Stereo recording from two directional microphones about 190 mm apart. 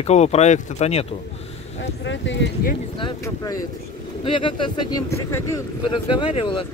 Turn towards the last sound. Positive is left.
turn(degrees=25)  # may be behind; listen again after turning